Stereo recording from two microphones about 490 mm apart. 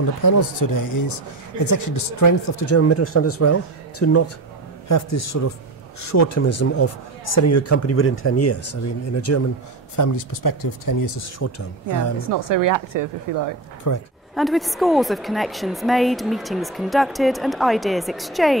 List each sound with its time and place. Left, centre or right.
0.2 s speech: left
12.3 s speech: right
13.9 s speech: left
14.3 s a woman's voice: centre